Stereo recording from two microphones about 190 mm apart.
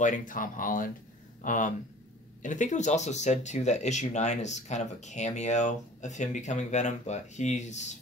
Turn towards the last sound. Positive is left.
turn(degrees=40)  # may be behind; listen again after turning